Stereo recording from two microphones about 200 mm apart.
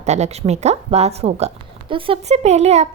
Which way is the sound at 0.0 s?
35° right (ahead or behind).